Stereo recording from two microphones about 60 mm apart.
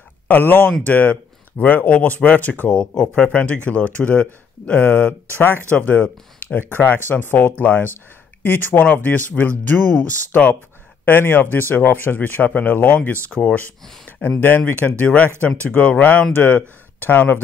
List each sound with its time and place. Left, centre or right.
0.3 s speech: left
2.7 s speech: centre; by 17.4 s left